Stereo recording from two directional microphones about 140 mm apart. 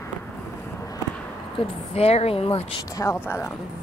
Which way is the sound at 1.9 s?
45° left (ahead or behind).